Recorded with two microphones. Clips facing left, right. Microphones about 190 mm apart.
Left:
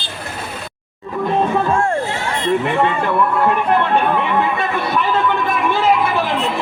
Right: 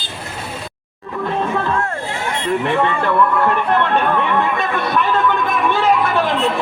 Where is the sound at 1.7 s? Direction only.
25° left (ahead or behind).